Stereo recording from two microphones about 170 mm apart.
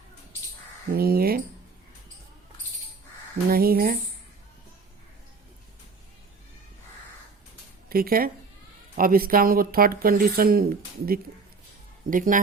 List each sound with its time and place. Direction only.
0.9 s speech: 65° right (ahead or behind)
3.5 s speech: 60° right (ahead or behind)
7.9 s speech: 60° right (ahead or behind)